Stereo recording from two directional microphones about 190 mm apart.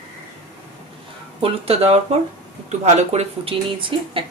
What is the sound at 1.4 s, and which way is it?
Music, 30° right (ahead or behind).